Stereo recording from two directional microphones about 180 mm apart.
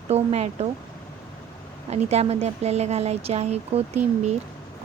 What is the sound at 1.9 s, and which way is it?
Speech, 35° right (ahead or behind).